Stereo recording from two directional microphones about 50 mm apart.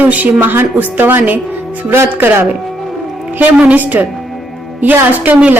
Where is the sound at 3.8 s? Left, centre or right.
Right.